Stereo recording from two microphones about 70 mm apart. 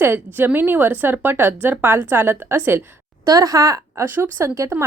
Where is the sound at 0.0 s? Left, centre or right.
Right.